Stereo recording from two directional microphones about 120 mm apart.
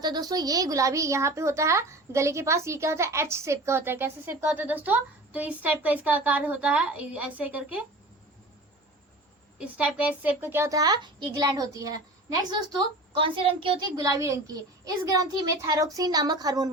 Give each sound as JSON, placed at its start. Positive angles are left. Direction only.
{"t": 0.0, "sound": "a woman's voice", "side_deg": -35}
{"t": 9.6, "sound": "a child's voice", "side_deg": -10}
{"t": 14.2, "sound": "a woman's voice", "side_deg": -25}